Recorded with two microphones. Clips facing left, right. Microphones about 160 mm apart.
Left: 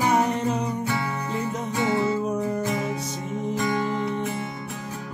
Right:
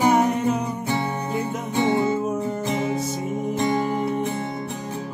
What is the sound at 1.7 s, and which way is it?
Music, 25° right (ahead or behind).